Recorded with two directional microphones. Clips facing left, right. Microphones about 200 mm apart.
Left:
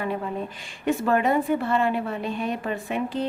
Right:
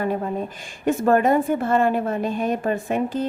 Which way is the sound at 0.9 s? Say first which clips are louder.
Right 4 dB; 45° right (ahead or behind).